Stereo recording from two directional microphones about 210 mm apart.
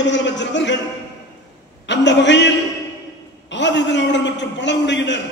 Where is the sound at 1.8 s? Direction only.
55° left (ahead or behind).